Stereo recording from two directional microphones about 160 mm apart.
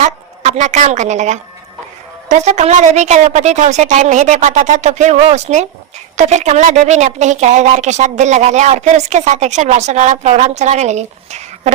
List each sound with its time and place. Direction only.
0.0 s a woman's voice: 45° right (ahead or behind)